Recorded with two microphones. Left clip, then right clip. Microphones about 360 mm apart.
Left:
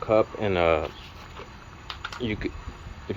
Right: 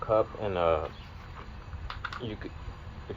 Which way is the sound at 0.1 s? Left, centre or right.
Left.